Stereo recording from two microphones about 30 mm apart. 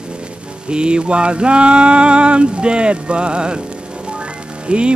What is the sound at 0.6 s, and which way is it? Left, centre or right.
Mantra, right.